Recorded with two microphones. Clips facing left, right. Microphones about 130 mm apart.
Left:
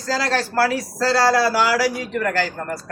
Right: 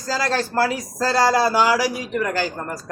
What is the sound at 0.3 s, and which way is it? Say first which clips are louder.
Speech: left 2 dB; 20° right (ahead or behind).